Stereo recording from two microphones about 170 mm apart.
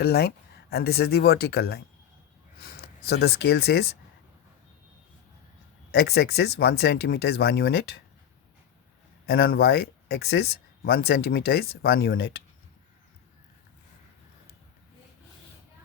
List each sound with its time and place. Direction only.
0.0 s speech: 70° left (ahead or behind)
5.9 s speech: 75° left (ahead or behind)
9.2 s speech: 65° left (ahead or behind)